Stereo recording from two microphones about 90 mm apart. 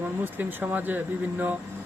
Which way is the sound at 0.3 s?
20° right (ahead or behind).